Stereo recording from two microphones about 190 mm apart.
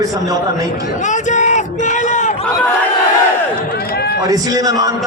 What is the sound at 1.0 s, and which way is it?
Speech, 40° left (ahead or behind).